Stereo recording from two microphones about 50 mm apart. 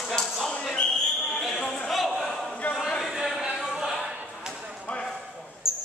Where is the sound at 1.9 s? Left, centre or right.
Centre.